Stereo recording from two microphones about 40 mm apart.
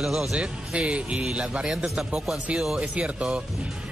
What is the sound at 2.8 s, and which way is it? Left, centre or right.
Speech, right.